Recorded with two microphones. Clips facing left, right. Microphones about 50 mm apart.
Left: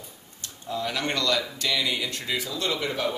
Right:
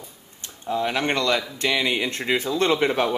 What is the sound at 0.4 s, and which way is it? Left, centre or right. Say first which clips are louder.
Speech: right 6 dB; right.